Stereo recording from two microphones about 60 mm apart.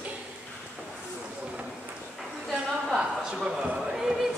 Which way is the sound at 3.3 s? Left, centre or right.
Centre.